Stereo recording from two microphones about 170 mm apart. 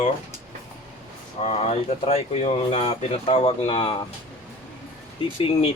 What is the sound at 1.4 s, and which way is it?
Speech, 40° left (ahead or behind).